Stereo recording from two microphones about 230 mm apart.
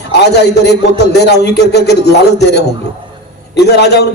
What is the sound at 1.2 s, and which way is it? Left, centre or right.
A man's voice, left.